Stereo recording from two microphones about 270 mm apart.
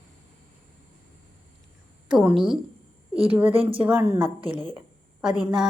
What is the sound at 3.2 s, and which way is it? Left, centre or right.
Speech, centre.